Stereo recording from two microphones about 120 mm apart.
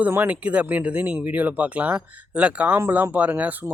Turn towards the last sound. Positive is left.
turn(degrees=-15)  # may be behind; listen again after turning